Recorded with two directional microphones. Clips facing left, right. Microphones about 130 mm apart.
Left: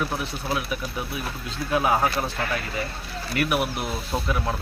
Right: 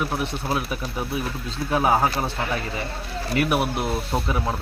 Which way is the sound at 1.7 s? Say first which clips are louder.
Right 2 dB; 30° right (ahead or behind).